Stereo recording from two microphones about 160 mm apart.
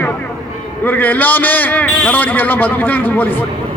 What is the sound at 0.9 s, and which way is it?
A man's voice, 10° left (ahead or behind).